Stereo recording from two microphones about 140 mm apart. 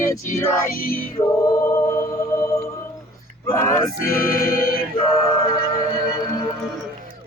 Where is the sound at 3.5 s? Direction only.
20° left (ahead or behind).